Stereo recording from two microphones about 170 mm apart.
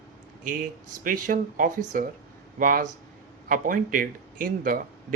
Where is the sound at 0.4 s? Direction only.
55° right (ahead or behind).